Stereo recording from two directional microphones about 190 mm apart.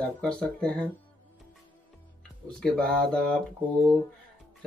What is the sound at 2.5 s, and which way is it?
Speech, 5° left (ahead or behind).